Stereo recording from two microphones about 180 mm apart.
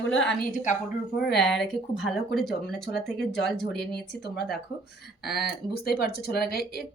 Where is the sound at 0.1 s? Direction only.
5° left (ahead or behind).